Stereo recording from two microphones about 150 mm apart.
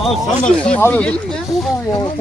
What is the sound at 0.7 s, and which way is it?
Speech, 10° left (ahead or behind).